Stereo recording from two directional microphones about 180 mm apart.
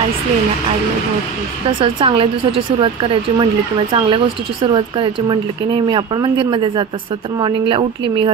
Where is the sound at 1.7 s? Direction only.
30° right (ahead or behind).